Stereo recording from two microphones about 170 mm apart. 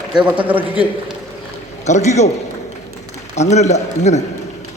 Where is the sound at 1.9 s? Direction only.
40° left (ahead or behind).